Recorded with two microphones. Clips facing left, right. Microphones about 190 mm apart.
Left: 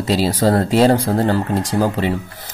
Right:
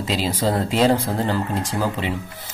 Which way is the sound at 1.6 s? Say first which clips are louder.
Left 6 dB; 40° left (ahead or behind).